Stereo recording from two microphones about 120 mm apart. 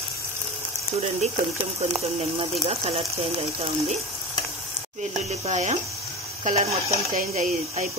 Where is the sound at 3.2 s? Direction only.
50° right (ahead or behind).